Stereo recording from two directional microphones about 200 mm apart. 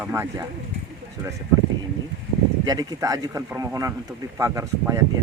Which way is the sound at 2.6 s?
20° right (ahead or behind).